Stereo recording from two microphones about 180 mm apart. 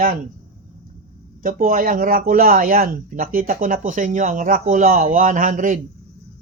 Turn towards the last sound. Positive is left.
turn(degrees=-45)  # may be behind; listen again after turning